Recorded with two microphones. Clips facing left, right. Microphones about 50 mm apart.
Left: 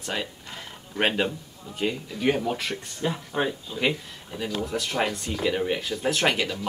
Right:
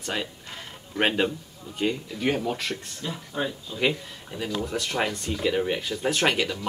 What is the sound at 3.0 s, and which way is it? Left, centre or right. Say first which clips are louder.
Speech: left 5 dB; left.